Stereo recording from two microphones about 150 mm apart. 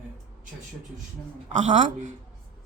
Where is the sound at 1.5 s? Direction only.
55° right (ahead or behind).